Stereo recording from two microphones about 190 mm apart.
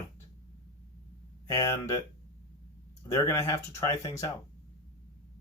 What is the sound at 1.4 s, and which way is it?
Speech, 15° left (ahead or behind).